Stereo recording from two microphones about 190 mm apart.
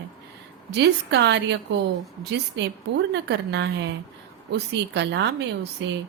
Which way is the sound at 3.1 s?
65° right (ahead or behind).